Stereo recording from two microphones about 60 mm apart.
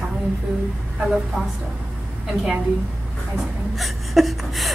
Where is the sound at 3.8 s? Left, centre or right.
Centre.